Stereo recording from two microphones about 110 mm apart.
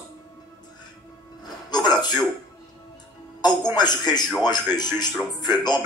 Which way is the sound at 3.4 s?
40° left (ahead or behind).